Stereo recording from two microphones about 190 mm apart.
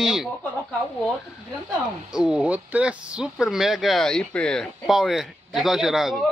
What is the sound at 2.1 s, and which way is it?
Speech, 5° right (ahead or behind).